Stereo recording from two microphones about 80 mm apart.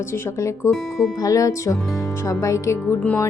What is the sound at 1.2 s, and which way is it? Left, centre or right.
Speech, left.